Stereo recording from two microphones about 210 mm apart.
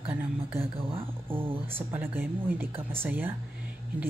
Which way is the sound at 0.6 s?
25° right (ahead or behind).